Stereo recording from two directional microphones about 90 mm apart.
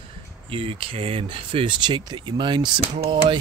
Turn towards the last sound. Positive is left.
turn(degrees=-60)  # may be behind; listen again after turning